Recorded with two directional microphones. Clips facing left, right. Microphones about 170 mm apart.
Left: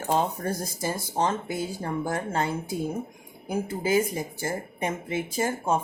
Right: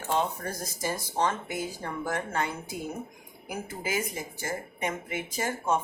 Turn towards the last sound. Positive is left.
turn(degrees=30)  # may be behind; listen again after turning